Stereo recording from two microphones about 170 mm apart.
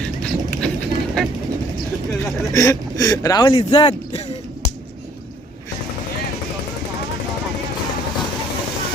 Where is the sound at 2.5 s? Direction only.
20° left (ahead or behind).